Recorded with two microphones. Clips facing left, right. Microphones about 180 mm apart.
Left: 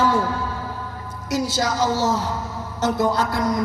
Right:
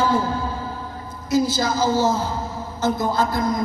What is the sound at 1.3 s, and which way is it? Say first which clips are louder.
A man's voice: right 3 dB; 75° left (ahead or behind).